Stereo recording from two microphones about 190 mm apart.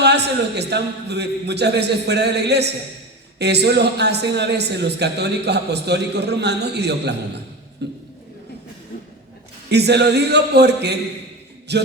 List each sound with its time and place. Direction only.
0.0 s a man's voice: 60° right (ahead or behind)
9.6 s a man's voice: 60° right (ahead or behind)